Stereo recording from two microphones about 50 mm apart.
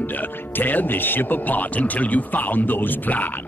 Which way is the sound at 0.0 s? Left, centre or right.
Left.